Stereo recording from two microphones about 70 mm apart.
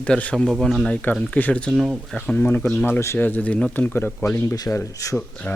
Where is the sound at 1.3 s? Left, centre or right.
Left.